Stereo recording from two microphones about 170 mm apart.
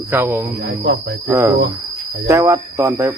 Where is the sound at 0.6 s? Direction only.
85° right.